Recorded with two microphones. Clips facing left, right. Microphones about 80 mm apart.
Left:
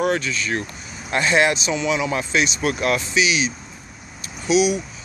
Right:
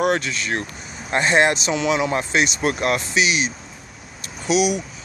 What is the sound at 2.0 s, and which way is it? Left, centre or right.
Speech, right.